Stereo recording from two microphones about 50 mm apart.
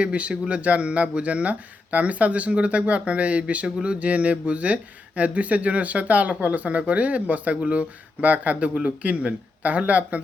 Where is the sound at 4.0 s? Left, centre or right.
Right.